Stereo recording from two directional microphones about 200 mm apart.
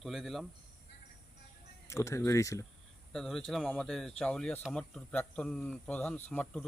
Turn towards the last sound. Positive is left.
turn(degrees=10)  # may be behind; listen again after turning